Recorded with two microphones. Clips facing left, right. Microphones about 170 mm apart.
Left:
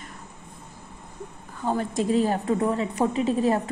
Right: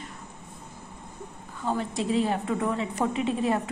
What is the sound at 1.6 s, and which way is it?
A woman's voice, 45° left (ahead or behind).